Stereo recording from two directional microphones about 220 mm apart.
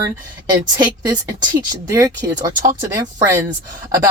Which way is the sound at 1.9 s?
15° right (ahead or behind).